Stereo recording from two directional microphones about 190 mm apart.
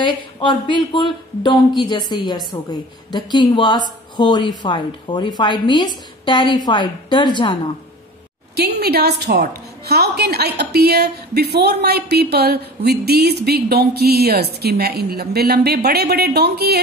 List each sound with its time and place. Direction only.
0.0 s a woman's voice: 25° left (ahead or behind)
8.5 s a woman's voice: 55° right (ahead or behind)